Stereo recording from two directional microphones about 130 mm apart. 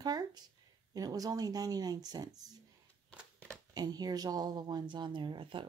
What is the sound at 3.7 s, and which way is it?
Speech, 30° right (ahead or behind).